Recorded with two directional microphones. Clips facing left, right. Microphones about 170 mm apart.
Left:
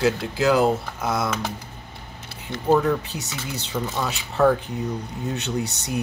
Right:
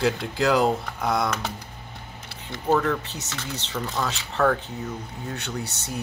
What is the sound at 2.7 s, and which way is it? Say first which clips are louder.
Speech: left 3 dB; 10° left (ahead or behind).